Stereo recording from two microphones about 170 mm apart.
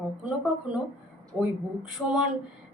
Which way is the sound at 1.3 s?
5° right (ahead or behind).